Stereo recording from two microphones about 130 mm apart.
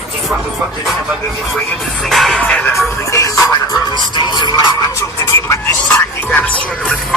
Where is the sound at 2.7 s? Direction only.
25° left (ahead or behind).